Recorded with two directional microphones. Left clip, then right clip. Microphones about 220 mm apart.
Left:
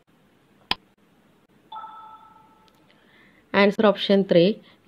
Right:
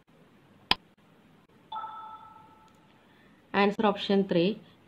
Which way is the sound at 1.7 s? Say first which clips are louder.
Even; centre (ahead or behind).